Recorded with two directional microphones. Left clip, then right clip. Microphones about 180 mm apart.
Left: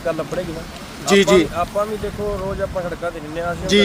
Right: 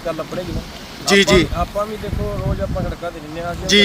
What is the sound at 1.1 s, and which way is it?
Speech, 5° left (ahead or behind).